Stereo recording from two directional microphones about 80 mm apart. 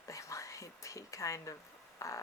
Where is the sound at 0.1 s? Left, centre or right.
Left.